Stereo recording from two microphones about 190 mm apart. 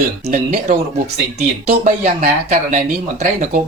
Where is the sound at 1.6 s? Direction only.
35° right (ahead or behind).